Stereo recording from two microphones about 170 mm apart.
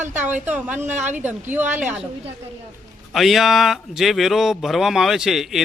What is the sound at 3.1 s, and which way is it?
Speech, centre (ahead or behind).